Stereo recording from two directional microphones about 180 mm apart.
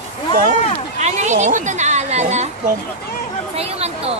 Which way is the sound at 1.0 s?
40° right (ahead or behind).